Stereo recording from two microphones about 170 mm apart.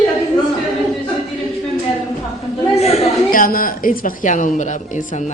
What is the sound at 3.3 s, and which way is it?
Speech, 55° left (ahead or behind).